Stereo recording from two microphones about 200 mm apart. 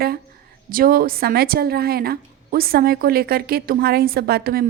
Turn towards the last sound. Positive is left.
turn(degrees=-50)  # may be behind; listen again after turning